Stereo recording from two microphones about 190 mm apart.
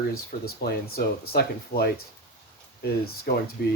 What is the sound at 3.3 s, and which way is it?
Speech, 55° left (ahead or behind).